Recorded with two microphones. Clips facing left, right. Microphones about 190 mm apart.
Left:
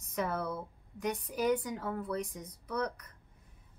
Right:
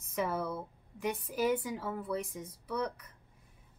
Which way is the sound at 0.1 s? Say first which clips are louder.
Right 1 dB; 5° right (ahead or behind).